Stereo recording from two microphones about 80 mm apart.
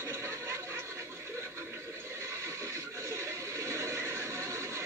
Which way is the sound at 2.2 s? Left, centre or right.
Right.